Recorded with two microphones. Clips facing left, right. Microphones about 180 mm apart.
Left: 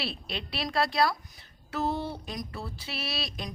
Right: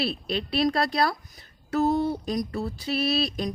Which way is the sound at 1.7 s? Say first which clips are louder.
Right 8 dB; 45° right (ahead or behind).